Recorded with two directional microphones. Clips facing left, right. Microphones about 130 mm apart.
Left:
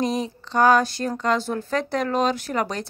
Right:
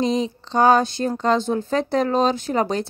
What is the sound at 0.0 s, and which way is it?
Speech, 25° right (ahead or behind).